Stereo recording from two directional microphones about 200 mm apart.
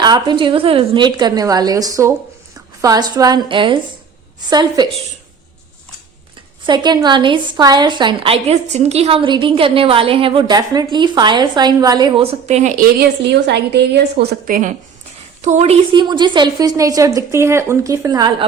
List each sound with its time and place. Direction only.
0.0 s a woman's voice: 20° right (ahead or behind)
6.7 s a woman's voice: 20° right (ahead or behind)
13.0 s a woman's voice: 55° right (ahead or behind); by 18.4 s 20° right (ahead or behind)